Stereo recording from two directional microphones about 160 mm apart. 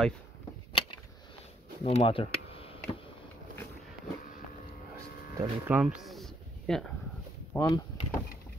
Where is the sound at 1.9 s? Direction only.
35° left (ahead or behind).